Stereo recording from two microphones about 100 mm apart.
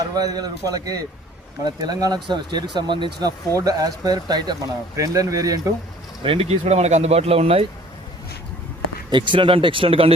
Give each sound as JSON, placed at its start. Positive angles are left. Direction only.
{"t": 0.0, "sound": "speech", "side_deg": -40}
{"t": 6.2, "sound": "speech", "side_deg": -70}
{"t": 9.0, "sound": "speech", "side_deg": -50}